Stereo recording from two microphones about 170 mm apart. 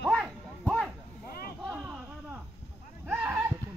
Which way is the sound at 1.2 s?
60° left (ahead or behind).